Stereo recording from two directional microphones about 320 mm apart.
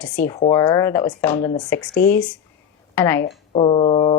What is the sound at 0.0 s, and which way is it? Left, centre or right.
A woman's voice, centre.